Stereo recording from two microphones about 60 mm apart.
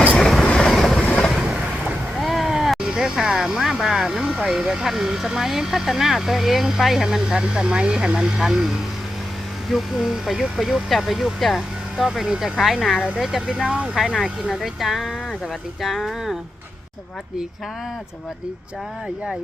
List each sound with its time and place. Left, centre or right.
0.2 s train: centre
0.4 s vehicle: centre
0.7 s train: centre
1.0 s vehicle: centre
2.1 s a sound: centre
4.4 s speech: centre
14.2 s speech: centre